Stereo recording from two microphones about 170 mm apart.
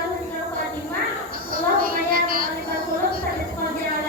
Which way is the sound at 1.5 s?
60° right (ahead or behind).